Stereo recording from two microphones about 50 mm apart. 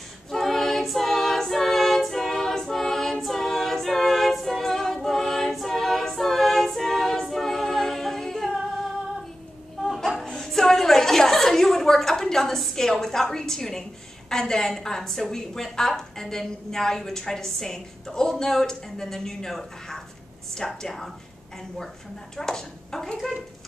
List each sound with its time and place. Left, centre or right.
0.3 s a capella: centre
9.8 s chuckle: centre
14.3 s a woman's voice: centre
22.4 s speech: centre